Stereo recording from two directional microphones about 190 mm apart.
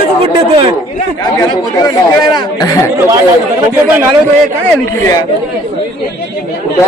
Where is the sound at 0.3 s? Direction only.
25° right (ahead or behind).